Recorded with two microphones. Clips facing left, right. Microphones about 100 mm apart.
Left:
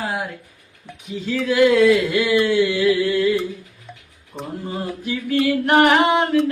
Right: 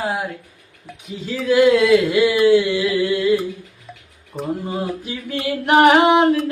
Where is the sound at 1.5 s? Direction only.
15° right (ahead or behind).